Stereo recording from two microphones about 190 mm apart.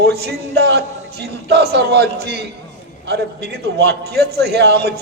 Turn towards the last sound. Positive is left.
turn(degrees=-60)  # may be behind; listen again after turning